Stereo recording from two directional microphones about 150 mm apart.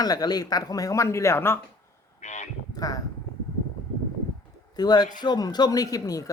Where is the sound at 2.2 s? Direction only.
50° left (ahead or behind).